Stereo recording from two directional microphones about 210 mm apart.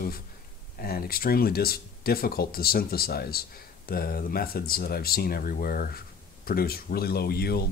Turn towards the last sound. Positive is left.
turn(degrees=50)  # may be behind; listen again after turning